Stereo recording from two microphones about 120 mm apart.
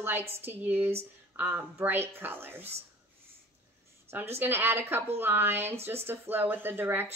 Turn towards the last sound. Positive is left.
turn(degrees=-20)  # may be behind; listen again after turning